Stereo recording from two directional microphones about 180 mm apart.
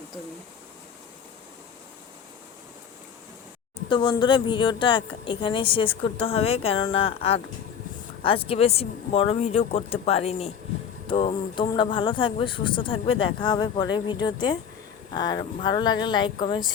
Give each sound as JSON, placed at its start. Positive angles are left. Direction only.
{"t": 3.8, "sound": "a woman's voice", "side_deg": 25}